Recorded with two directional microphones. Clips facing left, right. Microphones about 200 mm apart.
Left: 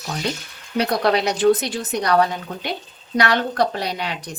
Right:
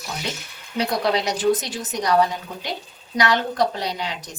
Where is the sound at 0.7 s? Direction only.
60° left (ahead or behind).